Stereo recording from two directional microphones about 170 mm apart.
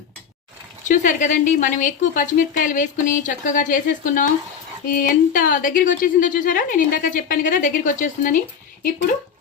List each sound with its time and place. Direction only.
0.9 s a woman's voice: 50° left (ahead or behind)